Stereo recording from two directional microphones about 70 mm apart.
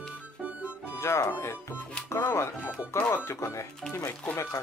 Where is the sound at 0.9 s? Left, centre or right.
Left.